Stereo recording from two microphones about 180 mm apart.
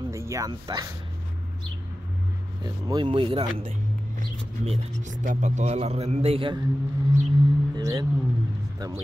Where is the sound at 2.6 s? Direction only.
25° right (ahead or behind).